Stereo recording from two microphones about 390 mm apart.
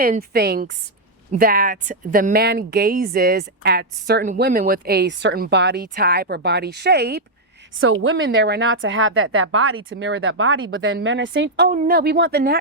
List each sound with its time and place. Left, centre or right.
0.0 s speech: right